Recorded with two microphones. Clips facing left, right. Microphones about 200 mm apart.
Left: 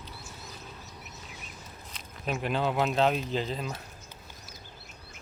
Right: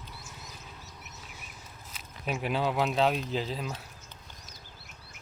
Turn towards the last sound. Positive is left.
turn(degrees=-5)  # may be behind; listen again after turning